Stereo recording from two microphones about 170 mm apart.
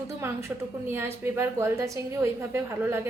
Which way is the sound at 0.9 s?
15° right (ahead or behind).